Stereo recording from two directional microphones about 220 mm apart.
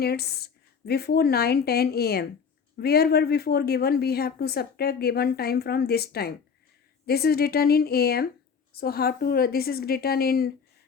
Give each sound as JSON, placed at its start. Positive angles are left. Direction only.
{"t": 0.0, "sound": "speech", "side_deg": 45}